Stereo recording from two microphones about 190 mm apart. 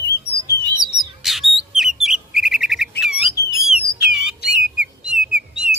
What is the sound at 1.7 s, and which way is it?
Bird, 5° right (ahead or behind).